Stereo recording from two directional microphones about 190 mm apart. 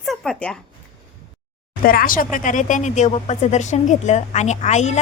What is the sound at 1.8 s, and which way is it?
A woman's voice, 50° left (ahead or behind).